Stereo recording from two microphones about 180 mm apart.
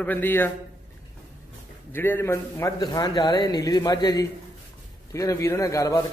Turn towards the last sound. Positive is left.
turn(degrees=20)  # may be behind; listen again after turning